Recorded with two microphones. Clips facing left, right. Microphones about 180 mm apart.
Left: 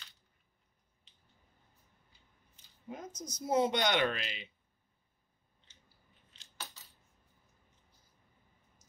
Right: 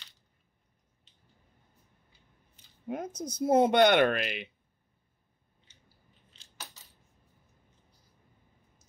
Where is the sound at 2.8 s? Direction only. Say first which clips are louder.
Right 9 dB; 65° right (ahead or behind).